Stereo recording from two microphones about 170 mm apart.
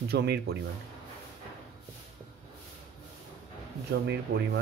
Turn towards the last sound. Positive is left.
turn(degrees=-60)  # may be behind; listen again after turning